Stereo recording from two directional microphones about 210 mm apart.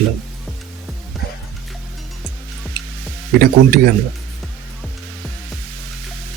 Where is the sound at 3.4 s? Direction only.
45° right (ahead or behind).